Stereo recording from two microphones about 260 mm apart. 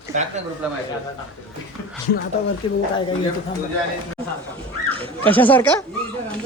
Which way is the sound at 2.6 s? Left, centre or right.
Left.